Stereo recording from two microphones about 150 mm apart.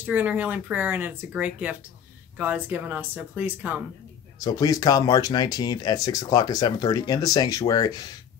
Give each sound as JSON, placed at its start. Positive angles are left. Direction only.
{"t": 0.0, "sound": "speech", "side_deg": -10}
{"t": 4.4, "sound": "speech", "side_deg": 25}